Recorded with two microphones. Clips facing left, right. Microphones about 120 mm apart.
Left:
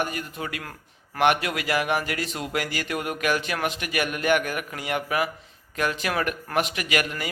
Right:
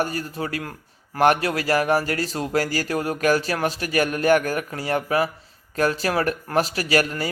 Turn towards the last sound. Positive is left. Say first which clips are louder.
# right 5 dB
turn(degrees=-35)  # may be behind; listen again after turning